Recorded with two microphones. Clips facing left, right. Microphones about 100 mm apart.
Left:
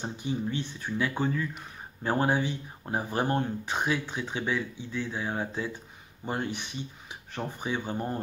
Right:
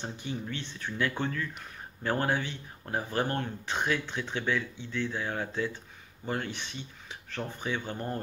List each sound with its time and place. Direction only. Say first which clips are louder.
0.0 s speech: left 5 dB; 15° left (ahead or behind)